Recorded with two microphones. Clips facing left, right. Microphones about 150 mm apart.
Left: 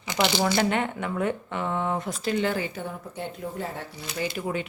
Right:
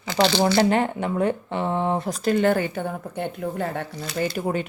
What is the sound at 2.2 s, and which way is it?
Speech, 50° right (ahead or behind).